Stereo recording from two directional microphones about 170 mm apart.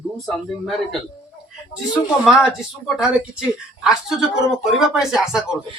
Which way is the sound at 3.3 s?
5° right (ahead or behind).